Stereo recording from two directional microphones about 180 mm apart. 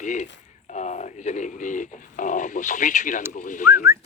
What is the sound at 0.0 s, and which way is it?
Speech, 45° left (ahead or behind).